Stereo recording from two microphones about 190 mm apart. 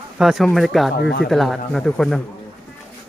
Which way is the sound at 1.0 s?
70° left (ahead or behind).